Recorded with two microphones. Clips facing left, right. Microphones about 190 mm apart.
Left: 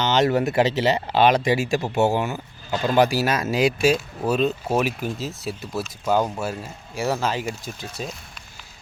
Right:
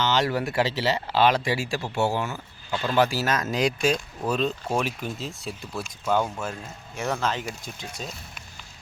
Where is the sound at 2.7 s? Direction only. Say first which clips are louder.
Left 5 dB; 40° left (ahead or behind).